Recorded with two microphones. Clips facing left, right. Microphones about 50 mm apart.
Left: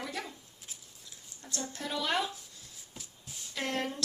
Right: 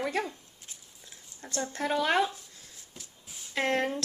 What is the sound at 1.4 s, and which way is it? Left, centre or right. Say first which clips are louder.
Speech: right 7 dB; right.